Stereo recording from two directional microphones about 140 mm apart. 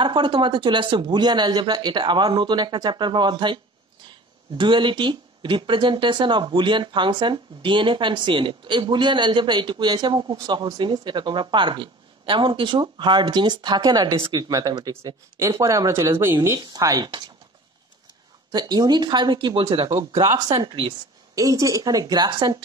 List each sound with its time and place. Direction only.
0.0 s speech: 35° right (ahead or behind)
4.6 s speech: 35° right (ahead or behind)
18.5 s speech: 30° right (ahead or behind)
20.0 s speech: 25° right (ahead or behind)
21.4 s speech: 25° right (ahead or behind)